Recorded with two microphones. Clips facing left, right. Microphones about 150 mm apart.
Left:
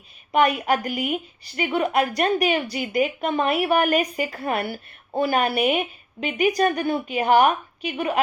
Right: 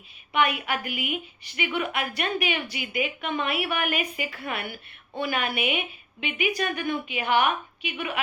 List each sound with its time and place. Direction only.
0.3 s a woman's voice: 40° left (ahead or behind)